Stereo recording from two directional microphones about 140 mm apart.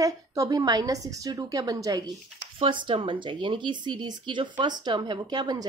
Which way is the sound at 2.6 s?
35° right (ahead or behind).